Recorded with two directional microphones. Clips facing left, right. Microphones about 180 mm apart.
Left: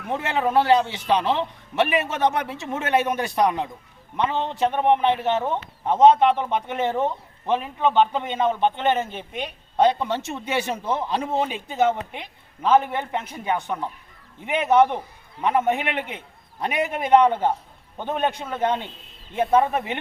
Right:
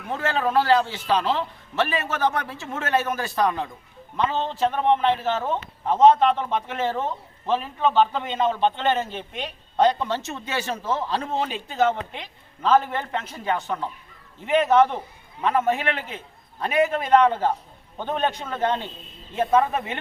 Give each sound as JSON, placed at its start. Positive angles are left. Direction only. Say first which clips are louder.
{"t": 0.1, "sound": "a man's voice", "louder": "left 1 dB", "side_deg": 20}